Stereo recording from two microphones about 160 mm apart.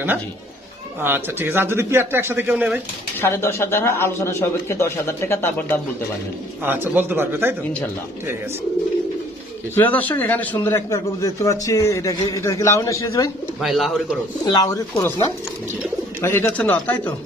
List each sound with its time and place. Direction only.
1.0 s speech: 15° right (ahead or behind)
3.2 s speech: 15° left (ahead or behind)
6.6 s speech: 15° right (ahead or behind)
9.8 s a man's voice: 10° left (ahead or behind)
13.6 s speech: centre (ahead or behind)
14.4 s a man's voice: 25° left (ahead or behind)
16.2 s speech: 15° left (ahead or behind)